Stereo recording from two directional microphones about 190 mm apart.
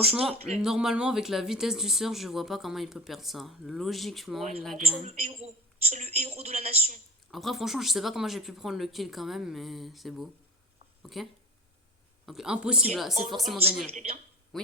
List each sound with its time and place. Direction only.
0.6 s speech: centre (ahead or behind)
4.9 s a woman's voice: 35° right (ahead or behind)
7.3 s speech: centre (ahead or behind)
13.9 s a woman's voice: 35° right (ahead or behind)
14.5 s speech: 5° left (ahead or behind)